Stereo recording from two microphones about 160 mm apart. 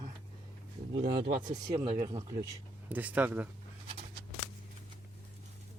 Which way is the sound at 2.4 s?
10° right (ahead or behind).